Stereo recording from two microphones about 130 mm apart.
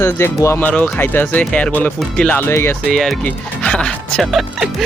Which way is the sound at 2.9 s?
Centre (ahead or behind).